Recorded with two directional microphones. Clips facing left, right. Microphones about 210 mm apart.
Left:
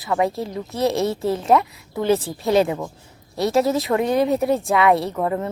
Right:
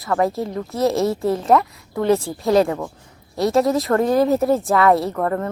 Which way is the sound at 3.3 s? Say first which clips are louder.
Right 2 dB; centre (ahead or behind).